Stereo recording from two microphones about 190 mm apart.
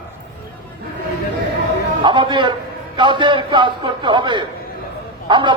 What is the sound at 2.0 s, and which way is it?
A man's voice, 25° right (ahead or behind).